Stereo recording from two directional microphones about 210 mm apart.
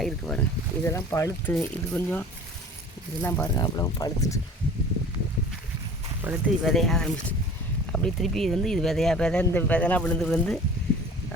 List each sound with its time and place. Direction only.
0.0 s speech: 5° left (ahead or behind)
0.9 s speech: 15° left (ahead or behind)
6.2 s speech: centre (ahead or behind)